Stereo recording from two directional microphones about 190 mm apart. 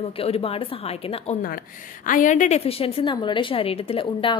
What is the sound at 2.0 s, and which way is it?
A woman's voice, 45° left (ahead or behind).